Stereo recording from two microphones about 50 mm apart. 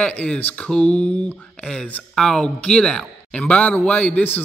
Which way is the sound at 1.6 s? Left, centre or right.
Centre.